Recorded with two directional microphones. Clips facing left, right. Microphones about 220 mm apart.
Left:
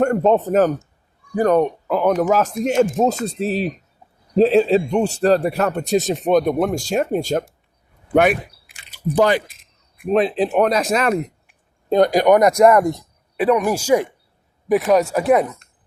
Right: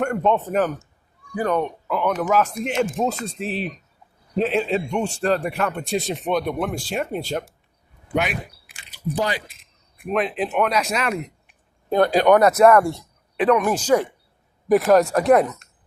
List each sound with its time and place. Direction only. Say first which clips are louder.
0.0 s a man's voice: left 5 dB; 35° left (ahead or behind); by 9.4 s 55° left (ahead or behind)
10.1 s a man's voice: left 6 dB; 35° left (ahead or behind)
11.9 s speech: left 2 dB; 15° left (ahead or behind)
14.7 s speech: even; centre (ahead or behind)